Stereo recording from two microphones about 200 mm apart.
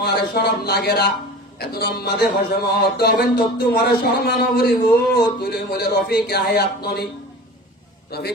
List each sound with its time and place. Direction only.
0.0 s a man's voice: 50° left (ahead or behind)
8.1 s a man's voice: 50° left (ahead or behind)